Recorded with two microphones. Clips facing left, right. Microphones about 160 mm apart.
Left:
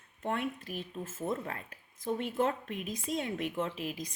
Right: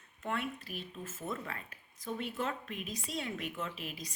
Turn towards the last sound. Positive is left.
turn(degrees=50)  # may be behind; listen again after turning